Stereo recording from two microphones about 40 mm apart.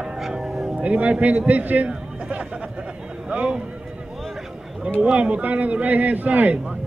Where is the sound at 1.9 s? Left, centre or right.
Right.